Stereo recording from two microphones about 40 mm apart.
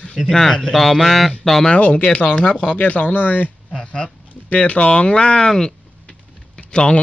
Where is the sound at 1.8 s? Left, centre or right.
Left.